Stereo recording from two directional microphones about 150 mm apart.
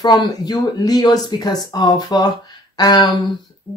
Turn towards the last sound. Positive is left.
turn(degrees=25)  # may be behind; listen again after turning